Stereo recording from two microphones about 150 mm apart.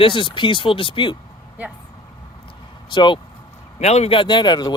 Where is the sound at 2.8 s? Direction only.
30° left (ahead or behind).